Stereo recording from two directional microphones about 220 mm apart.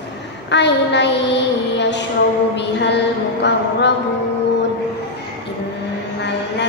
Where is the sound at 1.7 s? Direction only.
50° left (ahead or behind).